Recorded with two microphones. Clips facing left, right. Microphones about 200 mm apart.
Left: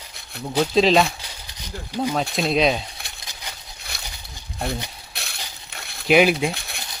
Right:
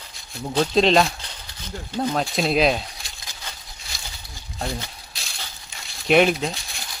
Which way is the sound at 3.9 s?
60° left (ahead or behind).